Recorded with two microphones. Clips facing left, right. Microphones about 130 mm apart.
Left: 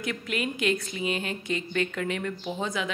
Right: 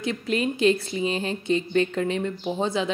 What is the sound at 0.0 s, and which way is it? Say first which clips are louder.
Speech: right 5 dB; 30° right (ahead or behind).